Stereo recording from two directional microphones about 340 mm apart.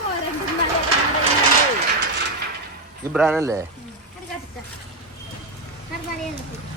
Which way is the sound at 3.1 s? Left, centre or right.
Centre.